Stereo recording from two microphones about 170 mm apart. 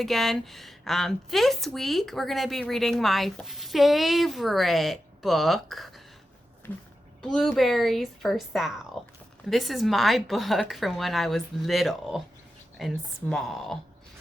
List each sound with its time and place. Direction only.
0.0 s a woman's voice: centre (ahead or behind)
7.2 s a woman's voice: centre (ahead or behind)